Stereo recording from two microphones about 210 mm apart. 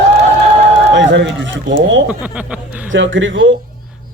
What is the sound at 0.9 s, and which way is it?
Speech, 60° right (ahead or behind).